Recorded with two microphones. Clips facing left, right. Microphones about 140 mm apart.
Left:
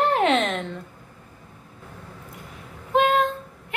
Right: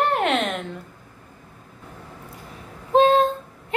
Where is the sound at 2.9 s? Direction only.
30° right (ahead or behind).